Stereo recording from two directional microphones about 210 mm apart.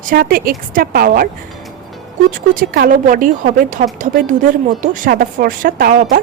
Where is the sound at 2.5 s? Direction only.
40° right (ahead or behind).